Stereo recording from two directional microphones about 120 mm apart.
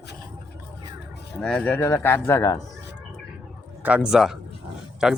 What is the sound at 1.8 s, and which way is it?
Speech, 20° left (ahead or behind).